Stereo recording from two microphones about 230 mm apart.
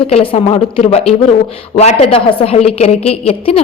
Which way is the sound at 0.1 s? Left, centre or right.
Left.